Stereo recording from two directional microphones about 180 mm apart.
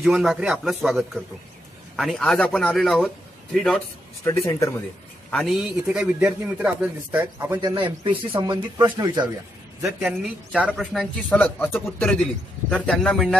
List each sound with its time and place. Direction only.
0.0 s a man's voice: centre (ahead or behind)
4.2 s speech: 15° left (ahead or behind)
5.3 s a man's voice: centre (ahead or behind)
5.9 s speech: 10° right (ahead or behind)
7.7 s speech: 30° right (ahead or behind)
9.8 s a man's voice: 5° right (ahead or behind)